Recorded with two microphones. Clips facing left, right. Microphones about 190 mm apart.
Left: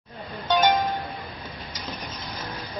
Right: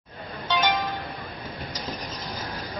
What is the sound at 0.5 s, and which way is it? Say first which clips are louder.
Music: left 4 dB; 45° left (ahead or behind).